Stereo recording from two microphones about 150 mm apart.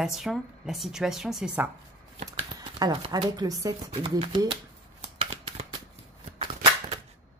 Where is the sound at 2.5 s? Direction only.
25° right (ahead or behind).